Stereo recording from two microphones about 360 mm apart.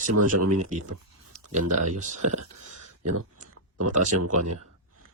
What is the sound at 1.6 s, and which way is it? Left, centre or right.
Speech, right.